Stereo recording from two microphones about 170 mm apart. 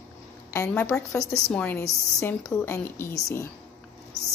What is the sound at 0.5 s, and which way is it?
Speech, 15° left (ahead or behind).